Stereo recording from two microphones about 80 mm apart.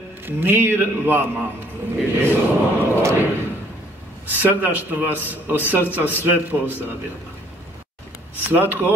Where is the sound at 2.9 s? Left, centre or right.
Right.